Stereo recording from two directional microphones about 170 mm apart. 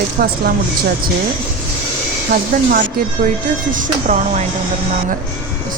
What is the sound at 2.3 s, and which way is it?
Speech, 60° right (ahead or behind).